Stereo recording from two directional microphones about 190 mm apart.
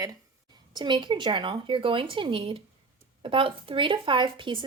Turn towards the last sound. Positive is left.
turn(degrees=-25)  # may be behind; listen again after turning